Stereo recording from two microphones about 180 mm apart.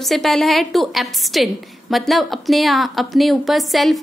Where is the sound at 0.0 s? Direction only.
Centre (ahead or behind).